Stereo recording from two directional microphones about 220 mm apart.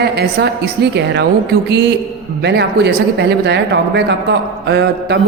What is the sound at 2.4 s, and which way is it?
A woman's voice, 50° right (ahead or behind).